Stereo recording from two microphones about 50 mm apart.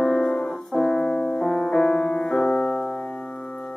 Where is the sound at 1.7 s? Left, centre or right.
Centre.